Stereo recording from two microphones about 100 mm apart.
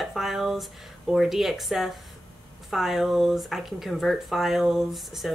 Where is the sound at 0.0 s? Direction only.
Centre (ahead or behind).